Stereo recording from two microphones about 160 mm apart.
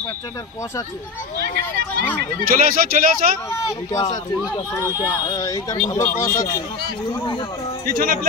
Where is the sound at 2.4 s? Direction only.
65° right (ahead or behind).